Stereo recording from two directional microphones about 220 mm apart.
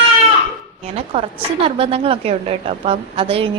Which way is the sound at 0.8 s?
30° right (ahead or behind).